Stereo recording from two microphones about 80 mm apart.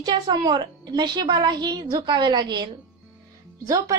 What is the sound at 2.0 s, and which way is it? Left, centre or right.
Speech, right.